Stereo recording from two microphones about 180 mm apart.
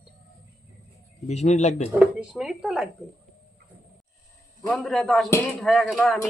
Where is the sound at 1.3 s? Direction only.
40° left (ahead or behind).